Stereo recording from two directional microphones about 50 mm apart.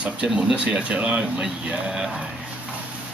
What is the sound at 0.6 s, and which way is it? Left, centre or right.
Speech, right.